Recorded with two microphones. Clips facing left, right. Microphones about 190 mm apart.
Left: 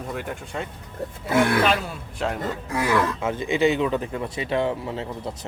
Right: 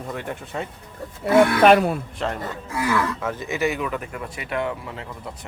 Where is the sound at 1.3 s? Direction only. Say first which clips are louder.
Right 6 dB; 55° right (ahead or behind).